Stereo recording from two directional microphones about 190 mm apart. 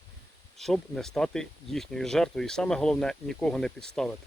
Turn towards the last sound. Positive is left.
turn(degrees=5)  # may be behind; listen again after turning